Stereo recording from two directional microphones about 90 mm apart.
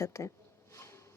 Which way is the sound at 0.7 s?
30° left (ahead or behind).